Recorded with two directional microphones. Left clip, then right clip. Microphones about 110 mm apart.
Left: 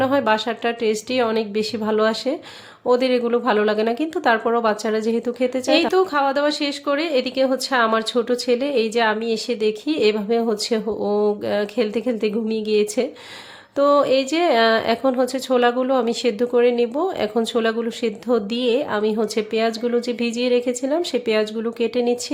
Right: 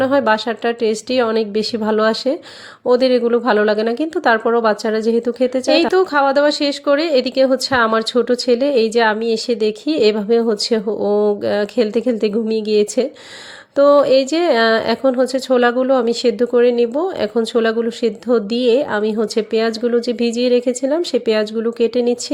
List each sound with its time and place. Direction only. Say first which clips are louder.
0.0 s a woman's voice: right 4 dB; 35° right (ahead or behind)